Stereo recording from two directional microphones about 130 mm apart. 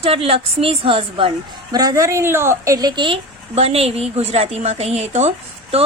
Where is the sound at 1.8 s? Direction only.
25° right (ahead or behind).